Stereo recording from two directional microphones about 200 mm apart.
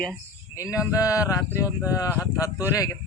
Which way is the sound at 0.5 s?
15° left (ahead or behind).